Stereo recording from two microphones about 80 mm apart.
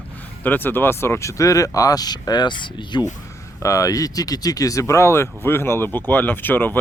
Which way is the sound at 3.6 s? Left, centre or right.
Left.